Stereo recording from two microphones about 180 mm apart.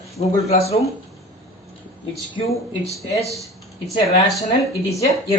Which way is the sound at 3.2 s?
Centre (ahead or behind).